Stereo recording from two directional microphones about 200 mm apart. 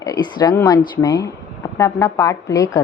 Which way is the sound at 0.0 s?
20° left (ahead or behind).